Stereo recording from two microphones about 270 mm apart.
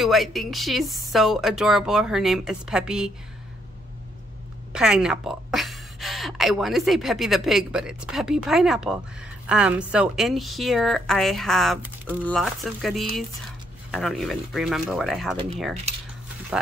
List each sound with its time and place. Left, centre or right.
0.0 s a woman's voice: centre
4.7 s a woman's voice: centre